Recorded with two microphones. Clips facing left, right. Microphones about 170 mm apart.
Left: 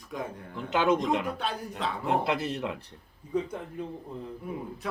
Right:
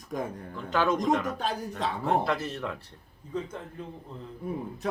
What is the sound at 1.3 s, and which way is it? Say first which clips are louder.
Speech: right 2 dB; 40° right (ahead or behind).